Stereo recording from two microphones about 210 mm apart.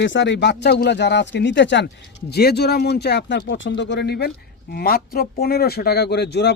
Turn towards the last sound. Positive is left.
turn(degrees=50)  # may be behind; listen again after turning